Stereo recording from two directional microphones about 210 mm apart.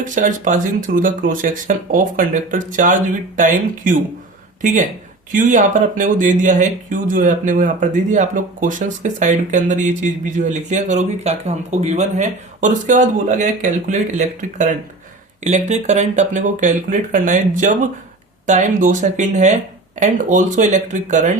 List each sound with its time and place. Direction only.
0.0 s speech: 40° right (ahead or behind)